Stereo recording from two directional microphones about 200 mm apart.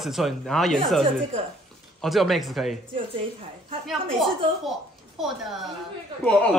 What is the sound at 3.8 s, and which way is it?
Speech, centre (ahead or behind).